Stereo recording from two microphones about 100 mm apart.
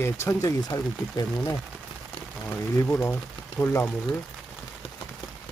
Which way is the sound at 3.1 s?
15° left (ahead or behind).